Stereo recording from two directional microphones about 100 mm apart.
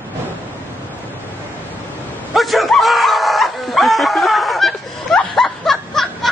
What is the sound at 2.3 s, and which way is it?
Bow-wow, centre (ahead or behind).